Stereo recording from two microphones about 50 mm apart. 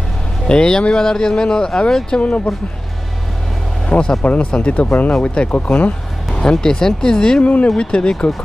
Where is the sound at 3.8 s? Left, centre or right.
Centre.